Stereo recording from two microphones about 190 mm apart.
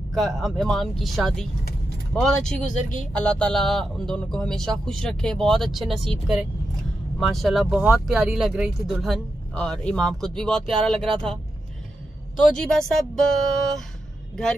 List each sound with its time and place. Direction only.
0.1 s speech: centre (ahead or behind)
2.6 s speech: 40° left (ahead or behind)
3.0 s speech: 5° left (ahead or behind)
12.5 s speech: 5° left (ahead or behind)
14.3 s speech: 5° left (ahead or behind)